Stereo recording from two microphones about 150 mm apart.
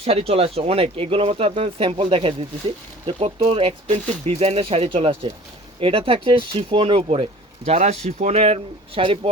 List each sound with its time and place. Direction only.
0.0 s speech: 40° right (ahead or behind)